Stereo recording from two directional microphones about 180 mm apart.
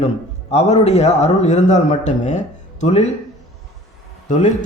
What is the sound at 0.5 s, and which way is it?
Speech, 35° left (ahead or behind).